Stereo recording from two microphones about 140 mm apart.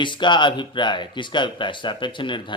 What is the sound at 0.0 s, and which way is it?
Speech, 35° left (ahead or behind).